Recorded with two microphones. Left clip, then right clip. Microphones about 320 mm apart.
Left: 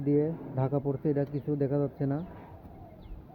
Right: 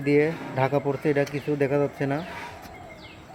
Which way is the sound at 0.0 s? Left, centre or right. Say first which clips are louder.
Right 6 dB; centre.